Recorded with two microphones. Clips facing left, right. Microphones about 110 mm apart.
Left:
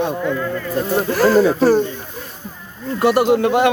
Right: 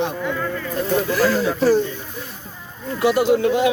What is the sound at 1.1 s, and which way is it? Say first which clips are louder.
Speech: left 9 dB; 50° left (ahead or behind).